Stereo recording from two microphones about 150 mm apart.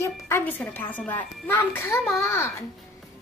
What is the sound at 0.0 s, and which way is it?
A woman's voice, 15° left (ahead or behind).